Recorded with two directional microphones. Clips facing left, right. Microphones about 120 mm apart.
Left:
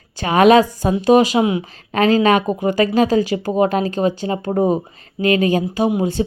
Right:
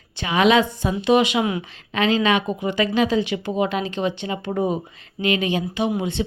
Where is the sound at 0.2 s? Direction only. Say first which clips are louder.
Left 6 dB; 45° left (ahead or behind).